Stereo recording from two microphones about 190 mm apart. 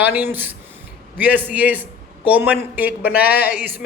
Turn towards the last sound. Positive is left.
turn(degrees=-10)  # may be behind; listen again after turning